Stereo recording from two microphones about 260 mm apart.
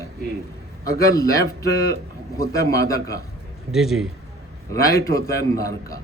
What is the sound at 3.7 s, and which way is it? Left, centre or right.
Speech, centre.